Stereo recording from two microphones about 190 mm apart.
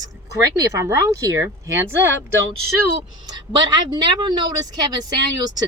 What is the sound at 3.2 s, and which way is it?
A woman's voice, 20° right (ahead or behind).